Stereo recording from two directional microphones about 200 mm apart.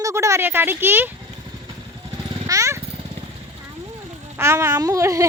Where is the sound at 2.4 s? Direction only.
15° right (ahead or behind).